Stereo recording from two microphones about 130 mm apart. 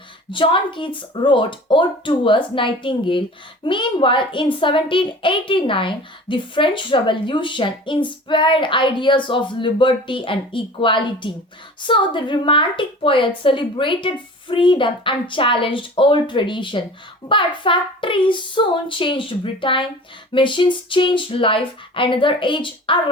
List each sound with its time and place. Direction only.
0.3 s speech: 40° left (ahead or behind)